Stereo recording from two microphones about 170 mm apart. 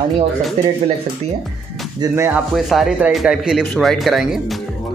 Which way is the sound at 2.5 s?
Centre (ahead or behind).